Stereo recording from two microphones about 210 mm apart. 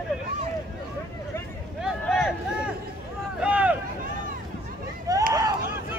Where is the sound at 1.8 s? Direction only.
Centre (ahead or behind).